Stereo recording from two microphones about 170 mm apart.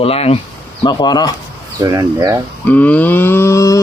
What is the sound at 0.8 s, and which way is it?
Speech, 25° left (ahead or behind).